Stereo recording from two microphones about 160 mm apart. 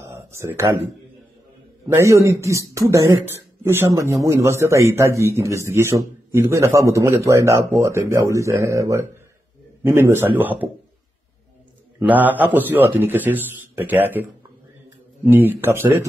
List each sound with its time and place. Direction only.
0.0 s a sound: 20° right (ahead or behind)
1.9 s speech: 20° right (ahead or behind)
12.0 s speech: 10° right (ahead or behind)
15.2 s speech: 15° right (ahead or behind)